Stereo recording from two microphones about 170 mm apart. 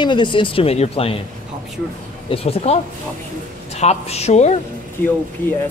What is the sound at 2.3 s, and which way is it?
Speech, 40° left (ahead or behind).